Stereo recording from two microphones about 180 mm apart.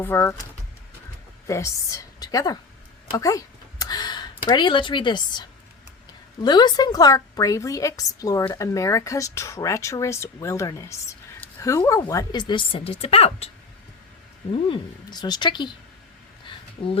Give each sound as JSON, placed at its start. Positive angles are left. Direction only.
{"t": 0.0, "sound": "a woman's voice", "side_deg": 15}
{"t": 1.5, "sound": "a woman's voice", "side_deg": 15}
{"t": 14.5, "sound": "a woman's voice", "side_deg": 25}
{"t": 16.5, "sound": "a sound", "side_deg": 30}